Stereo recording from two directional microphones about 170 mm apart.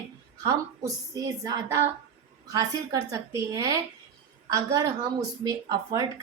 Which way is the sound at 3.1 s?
20° right (ahead or behind).